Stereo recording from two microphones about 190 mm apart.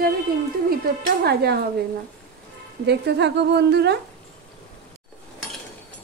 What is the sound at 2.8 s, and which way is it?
A woman's voice, 60° right (ahead or behind).